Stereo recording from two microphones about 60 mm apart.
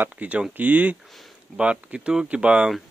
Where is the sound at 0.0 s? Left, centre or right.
Right.